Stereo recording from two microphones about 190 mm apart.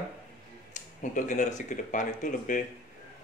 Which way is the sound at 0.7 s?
40° left (ahead or behind).